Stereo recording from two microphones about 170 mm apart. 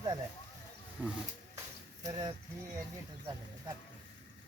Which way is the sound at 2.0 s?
25° right (ahead or behind).